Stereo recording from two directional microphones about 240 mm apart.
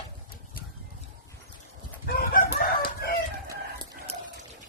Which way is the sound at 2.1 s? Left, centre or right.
Left.